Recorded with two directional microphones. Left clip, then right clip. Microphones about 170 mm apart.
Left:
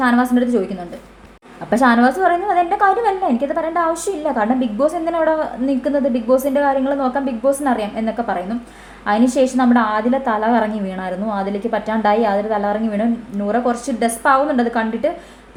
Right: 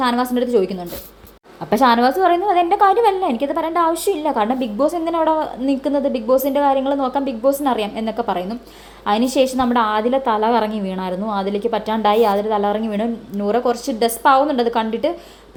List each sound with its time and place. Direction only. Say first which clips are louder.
0.0 s a woman's voice: left 2 dB; 25° right (ahead or behind)
1.7 s a woman's voice: even; 20° right (ahead or behind)